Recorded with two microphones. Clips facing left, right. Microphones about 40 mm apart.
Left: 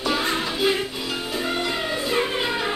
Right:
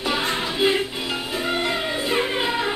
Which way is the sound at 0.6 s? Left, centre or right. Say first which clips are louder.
Right 2 dB; right.